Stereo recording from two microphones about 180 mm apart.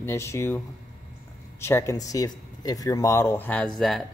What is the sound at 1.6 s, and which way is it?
A man's voice, 15° left (ahead or behind).